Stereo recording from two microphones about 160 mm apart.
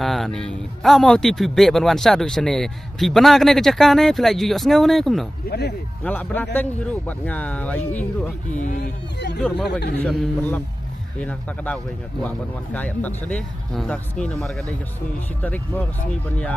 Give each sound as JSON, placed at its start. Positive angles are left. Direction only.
{"t": 0.0, "sound": "speech", "side_deg": 0}
{"t": 5.5, "sound": "speech", "side_deg": 90}
{"t": 6.0, "sound": "speech", "side_deg": 10}
{"t": 8.5, "sound": "speech", "side_deg": 50}
{"t": 9.9, "sound": "speech", "side_deg": 10}